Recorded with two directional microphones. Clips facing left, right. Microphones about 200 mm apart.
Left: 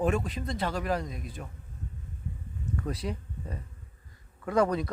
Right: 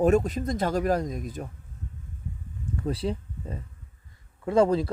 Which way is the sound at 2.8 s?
30° right (ahead or behind).